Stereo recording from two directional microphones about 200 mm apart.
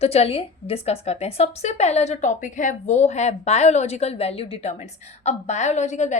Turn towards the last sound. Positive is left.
turn(degrees=35)  # may be behind; listen again after turning